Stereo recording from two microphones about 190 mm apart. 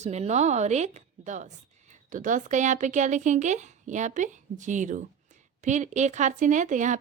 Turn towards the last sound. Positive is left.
turn(degrees=-40)  # may be behind; listen again after turning